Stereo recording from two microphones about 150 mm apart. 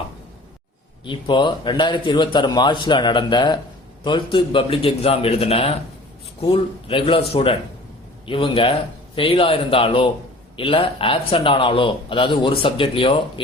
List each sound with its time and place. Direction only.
1.0 s speech: 35° left (ahead or behind)